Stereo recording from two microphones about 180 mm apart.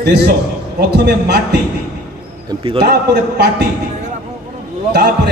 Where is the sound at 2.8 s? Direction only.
65° right (ahead or behind).